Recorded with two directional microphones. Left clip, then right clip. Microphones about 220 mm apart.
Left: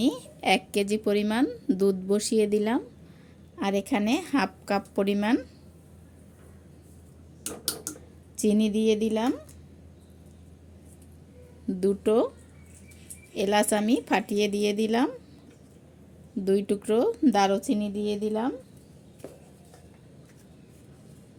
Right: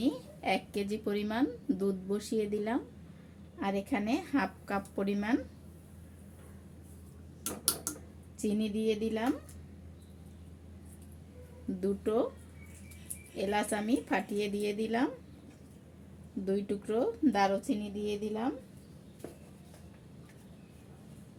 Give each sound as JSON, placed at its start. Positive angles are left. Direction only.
{"t": 0.0, "sound": "a woman's voice", "side_deg": 45}
{"t": 8.4, "sound": "speech", "side_deg": 45}
{"t": 11.8, "sound": "speech", "side_deg": 45}
{"t": 13.3, "sound": "speech", "side_deg": 45}
{"t": 16.5, "sound": "speech", "side_deg": 45}